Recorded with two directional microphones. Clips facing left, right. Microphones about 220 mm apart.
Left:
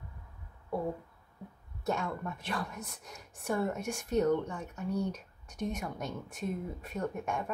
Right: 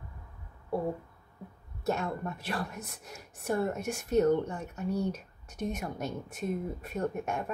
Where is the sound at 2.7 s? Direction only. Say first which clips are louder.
Right 1 dB; 5° right (ahead or behind).